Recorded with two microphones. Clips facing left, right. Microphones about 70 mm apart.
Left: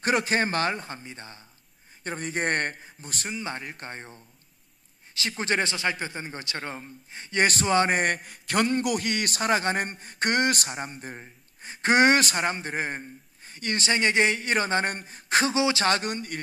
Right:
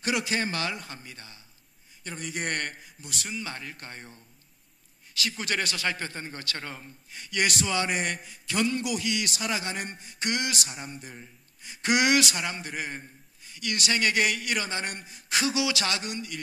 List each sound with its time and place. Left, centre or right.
0.0 s a man's voice: left
3.3 s a man's voice: left